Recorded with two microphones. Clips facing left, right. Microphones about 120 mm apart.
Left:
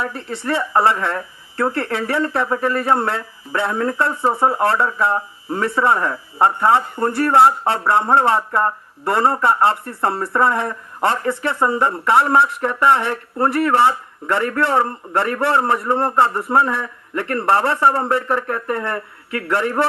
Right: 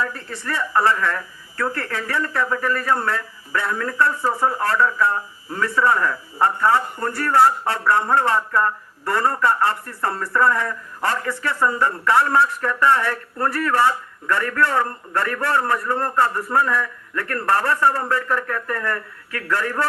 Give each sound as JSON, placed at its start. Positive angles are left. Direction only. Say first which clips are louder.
{"t": 0.0, "sound": "speech", "louder": "left 2 dB", "side_deg": 25}